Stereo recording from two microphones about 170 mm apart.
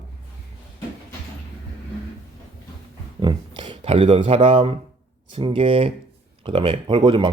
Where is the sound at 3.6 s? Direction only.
35° right (ahead or behind).